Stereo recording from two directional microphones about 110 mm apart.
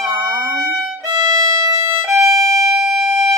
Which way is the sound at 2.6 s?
Centre (ahead or behind).